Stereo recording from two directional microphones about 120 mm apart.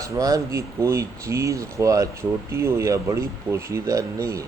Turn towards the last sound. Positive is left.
turn(degrees=-25)  # may be behind; listen again after turning